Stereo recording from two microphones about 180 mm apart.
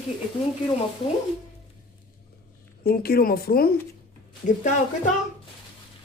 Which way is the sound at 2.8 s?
60° left (ahead or behind).